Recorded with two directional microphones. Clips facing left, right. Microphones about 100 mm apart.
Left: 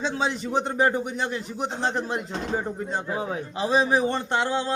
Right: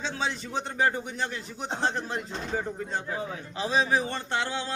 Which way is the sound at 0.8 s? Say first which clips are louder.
Left 1 dB; 20° left (ahead or behind).